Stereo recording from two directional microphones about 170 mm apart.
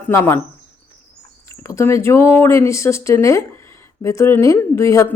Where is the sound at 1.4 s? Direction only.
15° left (ahead or behind).